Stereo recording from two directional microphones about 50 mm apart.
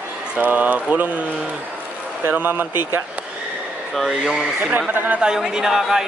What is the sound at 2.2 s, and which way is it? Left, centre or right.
Speech, right.